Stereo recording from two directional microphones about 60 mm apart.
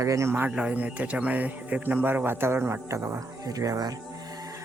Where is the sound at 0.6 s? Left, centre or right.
Right.